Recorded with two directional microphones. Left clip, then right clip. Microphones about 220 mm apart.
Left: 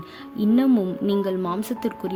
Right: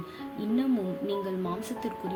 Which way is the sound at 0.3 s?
55° left (ahead or behind).